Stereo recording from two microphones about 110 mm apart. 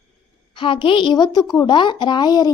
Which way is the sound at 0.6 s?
50° left (ahead or behind).